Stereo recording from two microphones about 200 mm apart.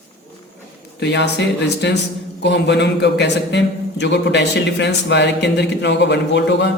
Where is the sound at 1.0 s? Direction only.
60° left (ahead or behind).